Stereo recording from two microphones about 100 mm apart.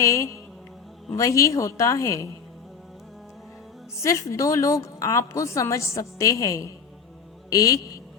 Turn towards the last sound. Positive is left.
turn(degrees=35)  # may be behind; listen again after turning